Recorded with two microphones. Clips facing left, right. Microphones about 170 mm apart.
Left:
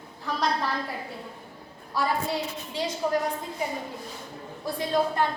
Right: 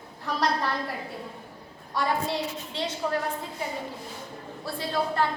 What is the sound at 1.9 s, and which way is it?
Speech, 5° left (ahead or behind).